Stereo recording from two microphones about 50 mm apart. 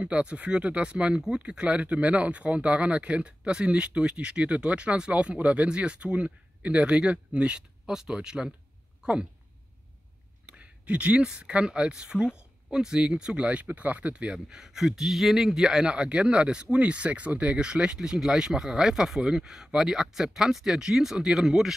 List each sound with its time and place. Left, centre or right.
0.0 s speech: right
10.4 s speech: right
13.7 s speech: right; by 21.7 s centre